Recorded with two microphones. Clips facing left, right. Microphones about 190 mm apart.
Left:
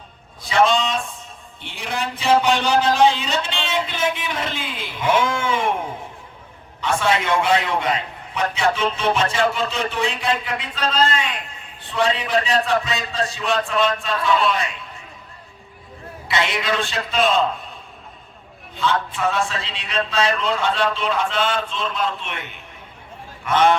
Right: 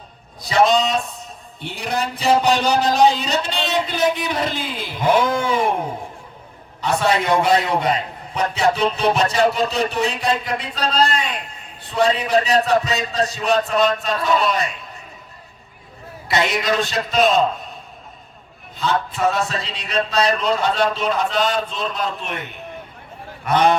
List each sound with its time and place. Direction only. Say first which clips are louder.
0.4 s a man's voice: right 2 dB; 40° right (ahead or behind)
6.8 s a man's voice: right 2 dB; 40° right (ahead or behind)
16.3 s a man's voice: right 3 dB; 40° right (ahead or behind)
18.8 s a man's voice: right 2 dB; 40° right (ahead or behind)